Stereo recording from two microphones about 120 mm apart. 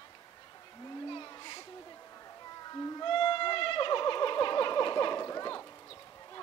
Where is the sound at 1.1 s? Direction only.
40° left (ahead or behind).